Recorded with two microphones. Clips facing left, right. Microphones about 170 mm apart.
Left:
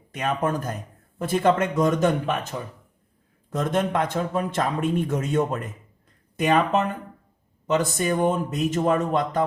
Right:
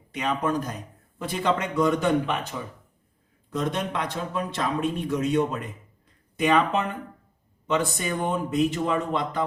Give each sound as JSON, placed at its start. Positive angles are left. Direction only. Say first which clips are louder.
{"t": 0.1, "sound": "a man's voice", "louder": "left 1 dB", "side_deg": 50}